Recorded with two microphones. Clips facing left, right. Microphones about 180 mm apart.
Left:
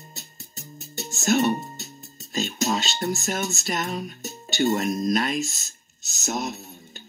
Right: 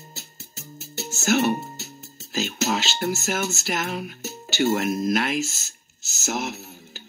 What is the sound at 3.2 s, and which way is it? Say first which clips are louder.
Speech: right 1 dB; 70° right (ahead or behind).